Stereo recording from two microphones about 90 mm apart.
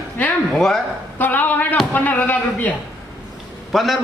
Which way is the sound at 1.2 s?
20° left (ahead or behind).